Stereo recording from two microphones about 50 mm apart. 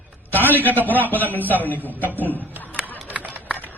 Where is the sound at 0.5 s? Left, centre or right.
Left.